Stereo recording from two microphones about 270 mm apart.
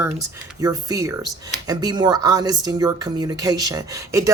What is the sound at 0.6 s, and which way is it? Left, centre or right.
Speech, centre.